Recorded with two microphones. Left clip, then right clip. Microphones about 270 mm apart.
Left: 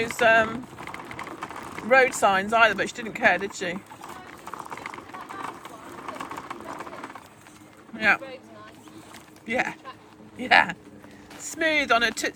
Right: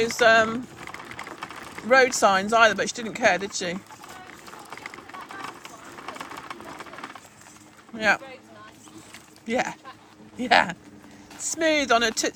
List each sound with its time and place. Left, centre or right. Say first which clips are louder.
0.0 s speech: right 2 dB; right
0.9 s typing: left 1 dB; centre
1.9 s speech: right 1 dB; right
4.7 s vehicle: left 2 dB; centre
6.0 s a sound: left 1 dB; centre
7.9 s speech: left 1 dB; centre
9.5 s speech: even; centre